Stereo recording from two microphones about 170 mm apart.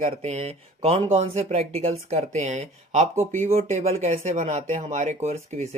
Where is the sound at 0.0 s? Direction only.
40° right (ahead or behind).